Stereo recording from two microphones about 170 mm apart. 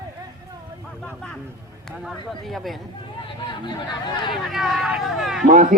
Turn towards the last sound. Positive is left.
turn(degrees=-50)  # may be behind; listen again after turning